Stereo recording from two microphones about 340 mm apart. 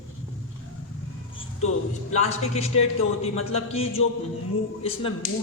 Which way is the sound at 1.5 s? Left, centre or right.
Left.